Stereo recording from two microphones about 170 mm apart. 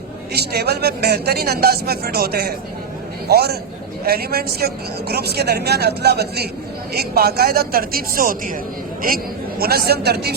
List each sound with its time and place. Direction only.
0.3 s a woman's voice: 70° right (ahead or behind)